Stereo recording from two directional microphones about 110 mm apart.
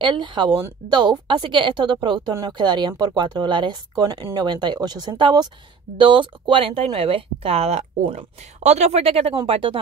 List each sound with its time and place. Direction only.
0.0 s a woman's voice: 45° right (ahead or behind); by 8.2 s 70° right (ahead or behind)
8.6 s speech: 90° right; by 9.8 s 50° right (ahead or behind)